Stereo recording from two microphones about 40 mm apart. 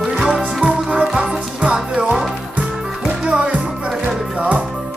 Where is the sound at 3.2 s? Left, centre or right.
Centre.